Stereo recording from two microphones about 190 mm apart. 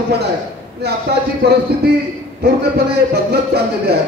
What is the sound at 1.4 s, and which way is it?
Speech, 60° right (ahead or behind).